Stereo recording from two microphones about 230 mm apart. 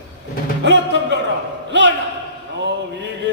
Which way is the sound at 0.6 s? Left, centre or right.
Right.